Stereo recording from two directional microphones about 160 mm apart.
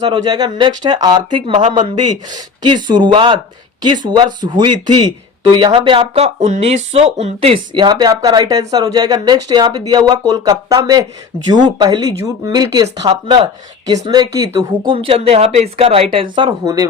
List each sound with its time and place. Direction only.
0.1 s speech: 25° right (ahead or behind)